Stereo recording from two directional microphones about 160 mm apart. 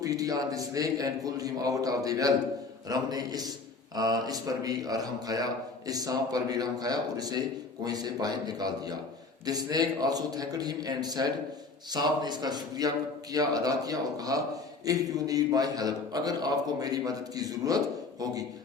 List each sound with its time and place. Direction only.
0.0 s a man's voice: 20° right (ahead or behind)